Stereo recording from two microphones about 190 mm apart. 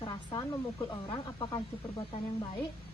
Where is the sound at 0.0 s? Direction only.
20° left (ahead or behind).